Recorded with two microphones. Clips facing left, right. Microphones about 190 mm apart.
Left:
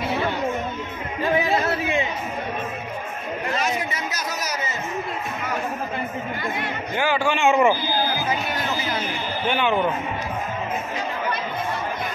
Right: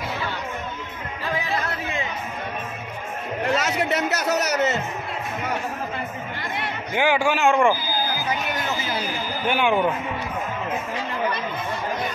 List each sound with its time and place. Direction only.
3.5 s a man's voice: 75° right (ahead or behind)
7.0 s a man's voice: 10° right (ahead or behind)
9.5 s a man's voice: 10° right (ahead or behind)